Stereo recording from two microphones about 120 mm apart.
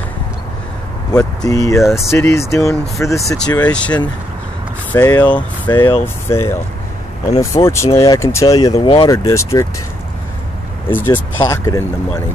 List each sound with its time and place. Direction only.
1.1 s speech: 30° left (ahead or behind); by 3.9 s 10° left (ahead or behind)
4.9 s speech: 35° left (ahead or behind)
6.3 s speech: 20° left (ahead or behind)
8.7 s speech: 45° left (ahead or behind)
9.0 s speech: 25° left (ahead or behind)
11.1 s speech: 20° left (ahead or behind)